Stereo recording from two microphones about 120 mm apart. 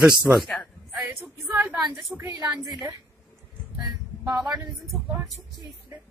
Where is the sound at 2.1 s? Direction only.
25° right (ahead or behind).